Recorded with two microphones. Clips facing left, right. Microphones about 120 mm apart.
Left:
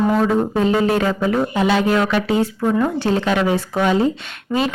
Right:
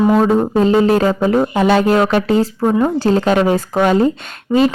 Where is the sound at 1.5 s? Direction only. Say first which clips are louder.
Right 4 dB; 45° right (ahead or behind).